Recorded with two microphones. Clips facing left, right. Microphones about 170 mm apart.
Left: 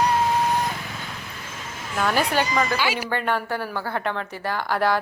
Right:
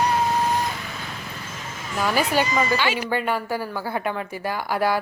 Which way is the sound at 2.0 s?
5° right (ahead or behind).